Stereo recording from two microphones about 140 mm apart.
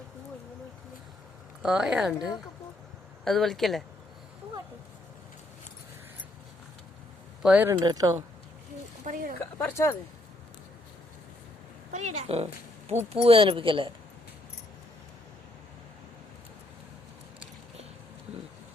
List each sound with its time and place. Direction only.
1.6 s speech: 5° right (ahead or behind)
3.2 s speech: centre (ahead or behind)
7.4 s speech: 10° right (ahead or behind)
7.7 s speech: 25° right (ahead or behind)
9.0 s a woman's voice: 80° right
9.6 s speech: 15° left (ahead or behind)
11.9 s speech: 55° right (ahead or behind); by 13.9 s 40° right (ahead or behind)